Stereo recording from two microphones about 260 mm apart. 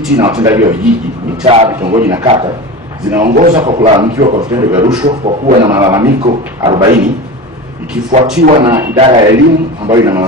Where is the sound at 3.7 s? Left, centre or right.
Centre.